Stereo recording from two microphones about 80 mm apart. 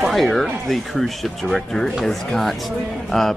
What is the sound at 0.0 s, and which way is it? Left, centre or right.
Speech, centre.